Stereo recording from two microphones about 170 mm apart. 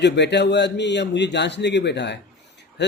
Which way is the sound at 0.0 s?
90° left.